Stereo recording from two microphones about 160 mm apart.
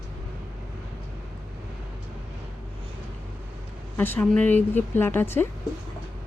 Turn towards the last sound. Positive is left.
turn(degrees=15)  # may be behind; listen again after turning